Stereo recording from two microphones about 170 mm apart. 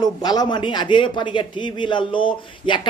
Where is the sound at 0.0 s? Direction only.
25° left (ahead or behind).